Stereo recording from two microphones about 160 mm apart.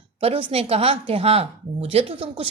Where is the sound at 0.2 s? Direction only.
35° right (ahead or behind).